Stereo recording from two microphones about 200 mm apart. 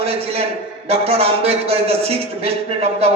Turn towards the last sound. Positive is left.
turn(degrees=-30)  # may be behind; listen again after turning